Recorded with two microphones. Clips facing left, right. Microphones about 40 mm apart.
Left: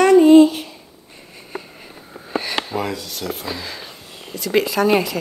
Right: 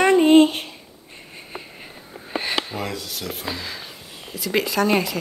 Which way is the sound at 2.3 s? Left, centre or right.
Centre.